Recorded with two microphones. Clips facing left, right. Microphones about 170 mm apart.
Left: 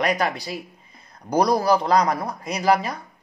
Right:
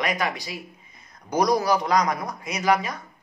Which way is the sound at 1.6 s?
30° left (ahead or behind).